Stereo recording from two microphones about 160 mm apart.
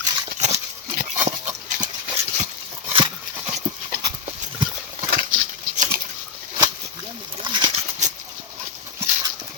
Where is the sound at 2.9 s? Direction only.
35° right (ahead or behind).